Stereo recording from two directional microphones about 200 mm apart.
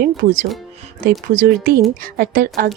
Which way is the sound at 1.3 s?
45° right (ahead or behind).